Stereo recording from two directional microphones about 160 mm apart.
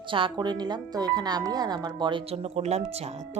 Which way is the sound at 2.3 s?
40° right (ahead or behind).